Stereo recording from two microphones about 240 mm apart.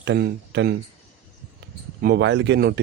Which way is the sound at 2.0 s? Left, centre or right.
Right.